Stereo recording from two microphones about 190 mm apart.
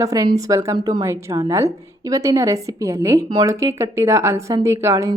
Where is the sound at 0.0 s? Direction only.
20° right (ahead or behind).